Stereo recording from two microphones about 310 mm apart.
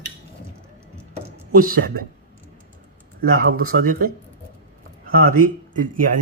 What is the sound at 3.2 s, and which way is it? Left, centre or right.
Speech, right.